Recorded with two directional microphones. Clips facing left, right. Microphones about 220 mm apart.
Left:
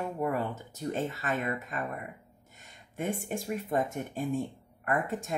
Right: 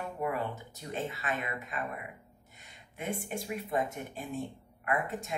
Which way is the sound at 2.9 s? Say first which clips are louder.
Left 3 dB; 45° left (ahead or behind).